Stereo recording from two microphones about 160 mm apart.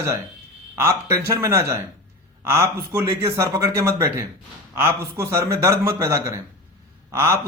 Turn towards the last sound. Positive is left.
turn(degrees=-15)  # may be behind; listen again after turning